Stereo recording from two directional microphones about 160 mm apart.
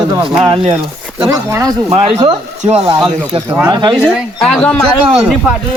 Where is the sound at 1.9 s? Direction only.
35° right (ahead or behind).